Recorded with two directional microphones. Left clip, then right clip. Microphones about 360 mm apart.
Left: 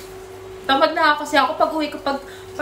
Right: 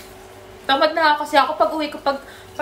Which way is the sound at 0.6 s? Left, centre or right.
Centre.